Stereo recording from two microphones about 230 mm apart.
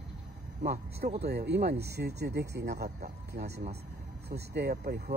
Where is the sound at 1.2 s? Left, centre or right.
Right.